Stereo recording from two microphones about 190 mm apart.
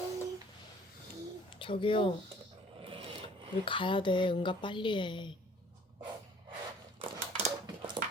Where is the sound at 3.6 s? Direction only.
25° left (ahead or behind).